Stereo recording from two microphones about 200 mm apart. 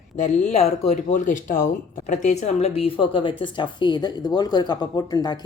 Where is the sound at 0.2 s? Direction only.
35° left (ahead or behind).